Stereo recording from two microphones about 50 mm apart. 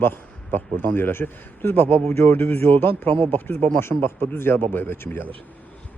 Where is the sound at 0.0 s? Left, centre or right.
Left.